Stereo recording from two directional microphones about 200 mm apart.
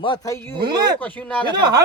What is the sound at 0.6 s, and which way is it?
Speech, 20° right (ahead or behind).